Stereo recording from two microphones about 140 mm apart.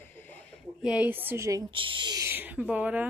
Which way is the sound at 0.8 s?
5° right (ahead or behind).